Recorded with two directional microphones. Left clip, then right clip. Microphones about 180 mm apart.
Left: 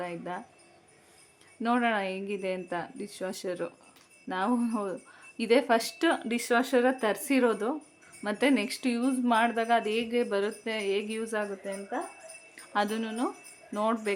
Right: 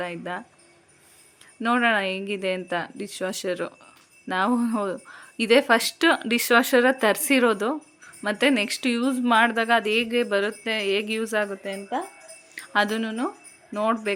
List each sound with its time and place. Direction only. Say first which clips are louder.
0.0 s speech: right 5 dB; 10° right (ahead or behind)
1.6 s speech: right 6 dB; 10° right (ahead or behind)